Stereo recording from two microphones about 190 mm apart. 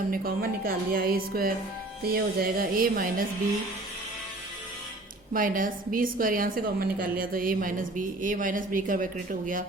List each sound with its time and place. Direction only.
0.1 s speech: 50° right (ahead or behind)
5.3 s speech: 45° right (ahead or behind)